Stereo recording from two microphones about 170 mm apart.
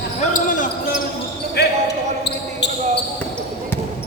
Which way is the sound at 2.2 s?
80° left.